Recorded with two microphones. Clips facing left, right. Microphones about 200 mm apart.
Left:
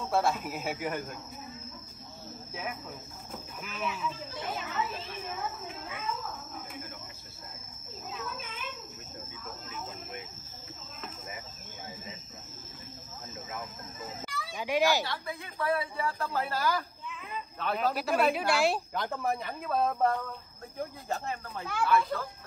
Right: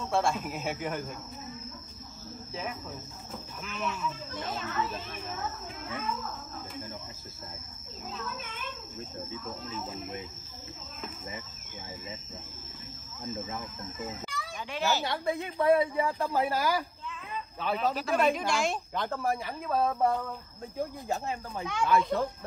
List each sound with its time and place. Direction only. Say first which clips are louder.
0.0 s speech: even; 5° left (ahead or behind)
3.6 s speech: right 1 dB; 5° left (ahead or behind)
8.2 s children playing: even; centre (ahead or behind)
14.6 s a child's voice: left 4 dB; 15° left (ahead or behind)
15.0 s speech: right 7 dB; 20° right (ahead or behind)
17.6 s speech: even; centre (ahead or behind)
21.1 s speech: right 2 dB; 15° right (ahead or behind)
21.8 s speech: right 2 dB; 25° right (ahead or behind)